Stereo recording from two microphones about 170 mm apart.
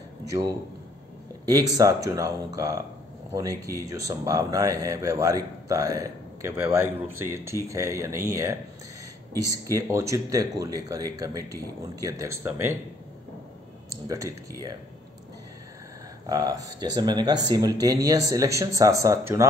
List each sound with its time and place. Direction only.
1.5 s a man's voice: 20° right (ahead or behind)
14.0 s a man's voice: 20° right (ahead or behind)
16.3 s a man's voice: 20° right (ahead or behind)